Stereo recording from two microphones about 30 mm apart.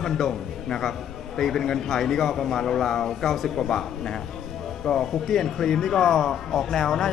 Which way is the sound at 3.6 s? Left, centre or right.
Centre.